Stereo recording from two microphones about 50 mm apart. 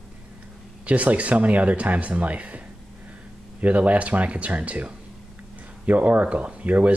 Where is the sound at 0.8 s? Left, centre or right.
Right.